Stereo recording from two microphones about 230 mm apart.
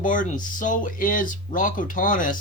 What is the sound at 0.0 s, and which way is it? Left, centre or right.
Speech, left.